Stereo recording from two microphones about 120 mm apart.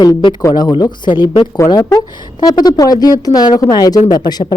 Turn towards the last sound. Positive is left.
turn(degrees=35)  # may be behind; listen again after turning